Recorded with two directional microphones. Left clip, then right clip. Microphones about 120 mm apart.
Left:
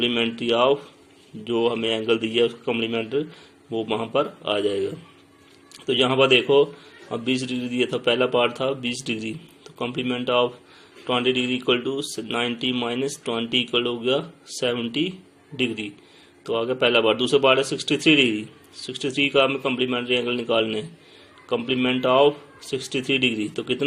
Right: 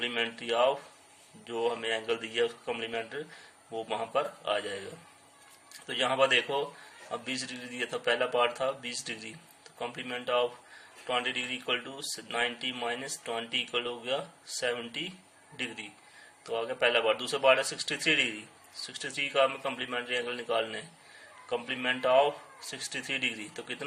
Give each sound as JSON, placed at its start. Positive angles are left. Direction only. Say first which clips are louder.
{"t": 0.0, "sound": "speech", "louder": "left 9 dB", "side_deg": 15}
{"t": 5.8, "sound": "speech", "louder": "left 8 dB", "side_deg": 15}